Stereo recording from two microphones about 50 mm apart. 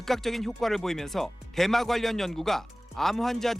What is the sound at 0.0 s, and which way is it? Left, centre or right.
Speech, centre.